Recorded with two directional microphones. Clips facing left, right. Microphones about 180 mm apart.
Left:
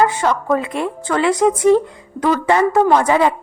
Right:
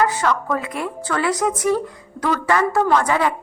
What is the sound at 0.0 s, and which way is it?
Speech, 25° left (ahead or behind).